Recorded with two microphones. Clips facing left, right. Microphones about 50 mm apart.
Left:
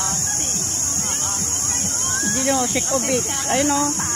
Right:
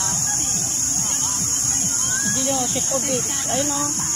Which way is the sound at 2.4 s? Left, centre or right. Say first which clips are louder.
Left 5 dB; left.